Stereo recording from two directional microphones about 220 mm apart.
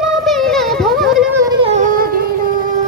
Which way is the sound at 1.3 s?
20° right (ahead or behind).